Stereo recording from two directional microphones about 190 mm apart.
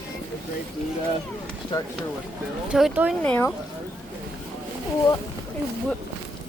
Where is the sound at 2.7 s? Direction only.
5° right (ahead or behind).